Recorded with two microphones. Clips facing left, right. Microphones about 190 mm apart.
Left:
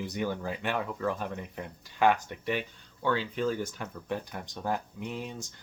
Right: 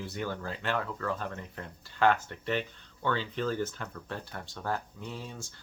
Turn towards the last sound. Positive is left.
turn(degrees=20)  # may be behind; listen again after turning